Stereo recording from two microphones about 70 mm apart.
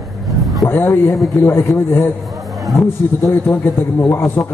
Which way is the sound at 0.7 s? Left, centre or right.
Left.